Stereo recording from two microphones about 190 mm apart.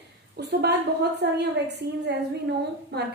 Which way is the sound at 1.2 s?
65° right (ahead or behind).